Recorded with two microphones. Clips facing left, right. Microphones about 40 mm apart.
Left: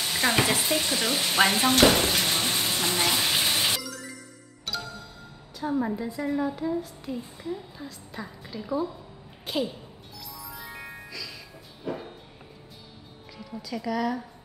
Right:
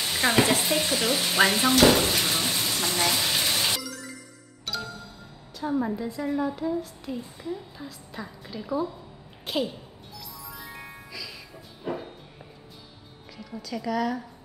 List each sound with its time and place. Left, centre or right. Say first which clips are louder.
0.1 s speech: right 2 dB; centre
1.7 s speech: right 2 dB; left
2.0 s speech: even; centre
2.3 s a sound: even; centre
2.8 s speech: even; centre
3.3 s a sound: left 1 dB; centre
4.7 s music: right 1 dB; centre
5.5 s speech: even; centre
10.1 s music: even; centre
13.4 s speech: even; centre